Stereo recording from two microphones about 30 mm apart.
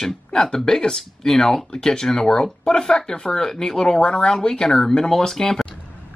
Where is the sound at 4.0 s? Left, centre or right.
Left.